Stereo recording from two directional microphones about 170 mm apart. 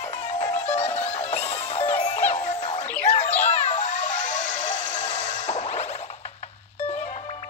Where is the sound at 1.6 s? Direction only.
40° left (ahead or behind).